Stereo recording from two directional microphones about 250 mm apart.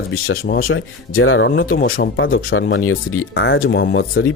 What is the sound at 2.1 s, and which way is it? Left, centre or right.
Speech, left.